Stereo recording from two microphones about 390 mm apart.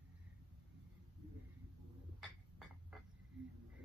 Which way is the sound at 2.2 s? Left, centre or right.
Centre.